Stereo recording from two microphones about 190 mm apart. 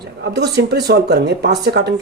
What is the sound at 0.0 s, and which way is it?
Speech, 60° right (ahead or behind).